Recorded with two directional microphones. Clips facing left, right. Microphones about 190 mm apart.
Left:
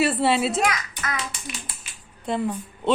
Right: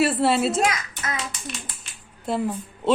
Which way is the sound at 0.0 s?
Centre (ahead or behind).